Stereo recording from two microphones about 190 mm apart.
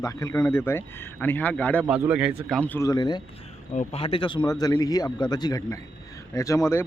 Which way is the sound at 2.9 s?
20° left (ahead or behind).